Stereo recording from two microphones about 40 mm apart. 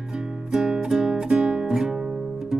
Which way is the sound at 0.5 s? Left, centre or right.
Centre.